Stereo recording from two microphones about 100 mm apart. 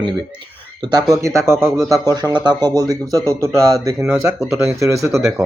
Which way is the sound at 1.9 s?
40° right (ahead or behind).